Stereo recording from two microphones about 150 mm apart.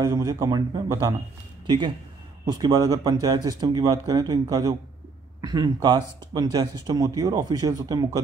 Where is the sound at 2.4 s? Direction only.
25° right (ahead or behind).